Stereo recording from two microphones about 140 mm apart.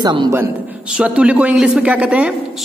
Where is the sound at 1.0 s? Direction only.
10° right (ahead or behind).